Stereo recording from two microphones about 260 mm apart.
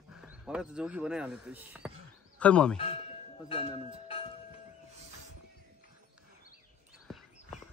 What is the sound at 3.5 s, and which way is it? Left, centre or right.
Speech, left.